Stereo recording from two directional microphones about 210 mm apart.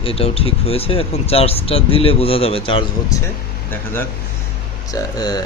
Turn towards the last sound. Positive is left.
turn(degrees=20)  # may be behind; listen again after turning